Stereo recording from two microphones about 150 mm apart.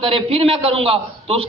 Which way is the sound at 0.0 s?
40° right (ahead or behind).